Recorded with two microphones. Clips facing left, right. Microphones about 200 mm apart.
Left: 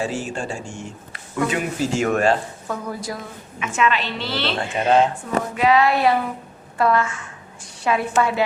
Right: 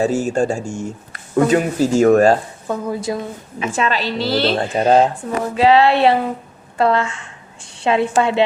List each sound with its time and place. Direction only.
0.0 s speech: 45° right (ahead or behind)
2.6 s speech: 25° right (ahead or behind)